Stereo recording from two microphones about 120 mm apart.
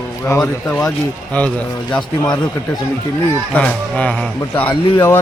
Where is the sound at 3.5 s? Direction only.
10° left (ahead or behind).